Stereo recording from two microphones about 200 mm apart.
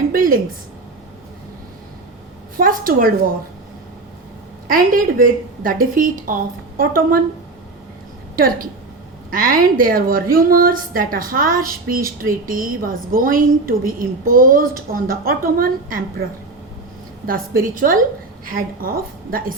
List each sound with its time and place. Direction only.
0.1 s a sound: 45° right (ahead or behind)
2.6 s a woman's voice: 45° right (ahead or behind)
4.7 s a woman's voice: 45° right (ahead or behind)
8.4 s a woman's voice: 45° right (ahead or behind)
17.2 s a woman's voice: 45° right (ahead or behind)